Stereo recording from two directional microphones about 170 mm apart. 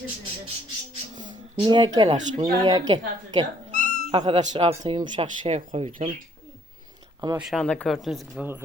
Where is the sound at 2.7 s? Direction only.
25° right (ahead or behind).